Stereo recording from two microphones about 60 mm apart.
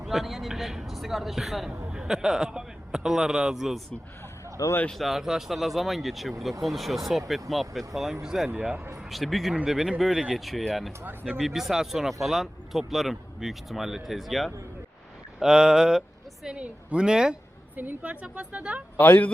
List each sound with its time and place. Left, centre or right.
0.0 s a man's voice: centre
4.9 s speech: centre
15.4 s speech: centre
17.7 s speech: right
18.9 s a woman's voice: left